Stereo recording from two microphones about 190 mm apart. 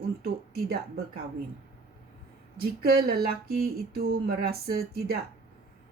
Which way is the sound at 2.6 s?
55° right (ahead or behind).